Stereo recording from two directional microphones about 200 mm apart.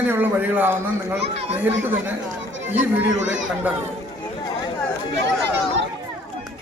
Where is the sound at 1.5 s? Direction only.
10° right (ahead or behind).